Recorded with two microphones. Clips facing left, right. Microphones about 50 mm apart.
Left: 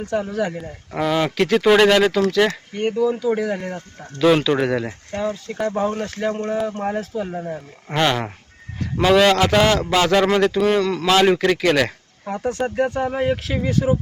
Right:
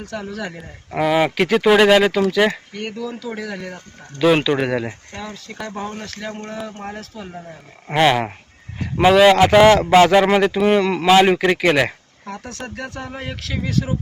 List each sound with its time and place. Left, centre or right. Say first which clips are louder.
0.0 s speech: left 6 dB; centre
0.5 s speech: right 1 dB; centre
2.7 s speech: left 8 dB; left
3.2 s speech: left 7 dB; centre
4.4 s speech: even; centre
5.1 s speech: left 7 dB; left
5.9 s speech: left 7 dB; left
7.9 s a man's voice: right 4 dB; centre
12.2 s speech: left 8 dB; centre